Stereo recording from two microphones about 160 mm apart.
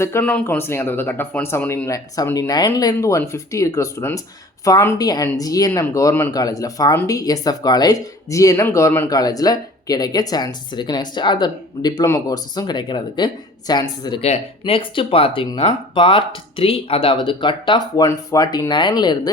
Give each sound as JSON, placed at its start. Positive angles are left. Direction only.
{"t": 0.0, "sound": "speech", "side_deg": 15}